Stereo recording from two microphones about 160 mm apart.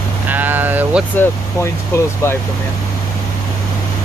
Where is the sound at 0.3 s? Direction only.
10° right (ahead or behind).